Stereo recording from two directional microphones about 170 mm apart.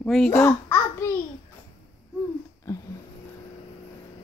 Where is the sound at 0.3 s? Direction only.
15° left (ahead or behind).